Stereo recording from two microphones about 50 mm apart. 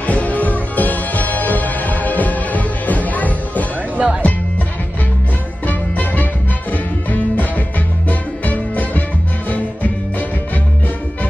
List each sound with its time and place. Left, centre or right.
0.0 s music: left
3.9 s music: right
5.7 s music: left